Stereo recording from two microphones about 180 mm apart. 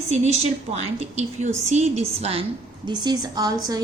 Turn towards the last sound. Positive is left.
turn(degrees=-20)  # may be behind; listen again after turning